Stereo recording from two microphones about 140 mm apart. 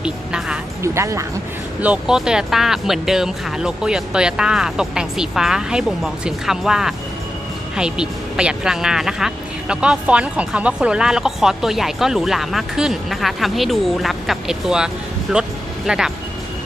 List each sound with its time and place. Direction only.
0.0 s music: 5° right (ahead or behind)
0.8 s speech: 20° right (ahead or behind)
1.8 s speech: 5° right (ahead or behind)